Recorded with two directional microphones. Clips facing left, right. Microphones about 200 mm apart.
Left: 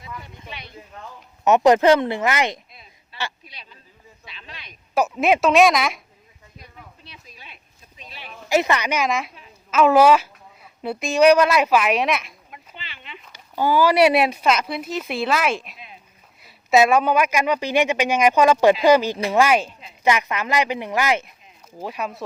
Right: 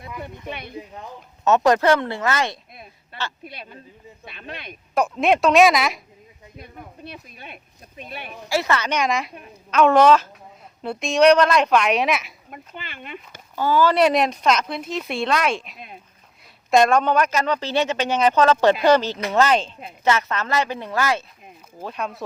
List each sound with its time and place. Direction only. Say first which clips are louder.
0.2 s speech: right 7 dB; 55° right (ahead or behind)
0.7 s speech: right 6 dB; 15° right (ahead or behind)
1.5 s speech: left 2 dB; 15° left (ahead or behind)
3.4 s speech: right 9 dB; 55° right (ahead or behind)
4.9 s speech: even; 5° left (ahead or behind)
6.6 s speech: right 7 dB; 55° right (ahead or behind)
8.4 s speech: left 3 dB; 20° left (ahead or behind); by 12.3 s centre (ahead or behind)
12.5 s speech: right 4 dB; 50° right (ahead or behind)
13.6 s speech: left 1 dB; 10° left (ahead or behind)